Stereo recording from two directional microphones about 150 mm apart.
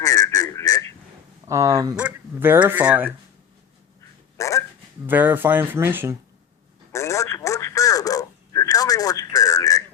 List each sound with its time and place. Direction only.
0.0 s a sound: 20° left (ahead or behind)
1.5 s speech: 20° right (ahead or behind)
2.0 s speech: 10° right (ahead or behind)
4.4 s dog: 20° left (ahead or behind)
5.0 s speech: 10° right (ahead or behind)
6.9 s telephone: 20° left (ahead or behind)